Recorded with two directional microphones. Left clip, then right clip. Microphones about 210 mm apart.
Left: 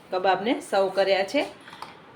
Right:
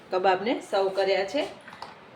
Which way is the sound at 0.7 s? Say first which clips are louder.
Left 3 dB; 25° left (ahead or behind).